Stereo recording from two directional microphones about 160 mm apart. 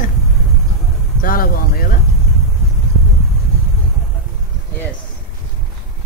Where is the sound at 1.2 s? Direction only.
65° left (ahead or behind).